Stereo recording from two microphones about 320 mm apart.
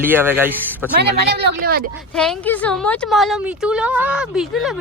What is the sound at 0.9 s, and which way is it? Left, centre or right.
Speech, right.